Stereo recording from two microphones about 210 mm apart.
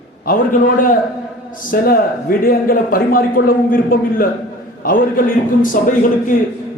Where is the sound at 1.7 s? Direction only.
45° left (ahead or behind).